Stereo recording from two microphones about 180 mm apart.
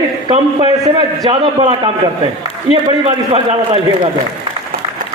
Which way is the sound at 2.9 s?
30° right (ahead or behind).